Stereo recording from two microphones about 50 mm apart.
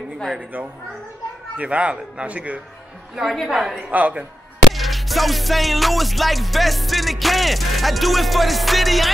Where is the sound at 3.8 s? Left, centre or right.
Right.